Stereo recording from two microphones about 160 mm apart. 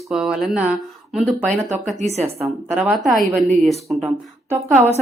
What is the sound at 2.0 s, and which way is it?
Speech, 40° right (ahead or behind).